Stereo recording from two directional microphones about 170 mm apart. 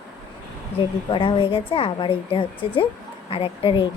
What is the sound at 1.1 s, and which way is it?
A woman's voice, 30° left (ahead or behind).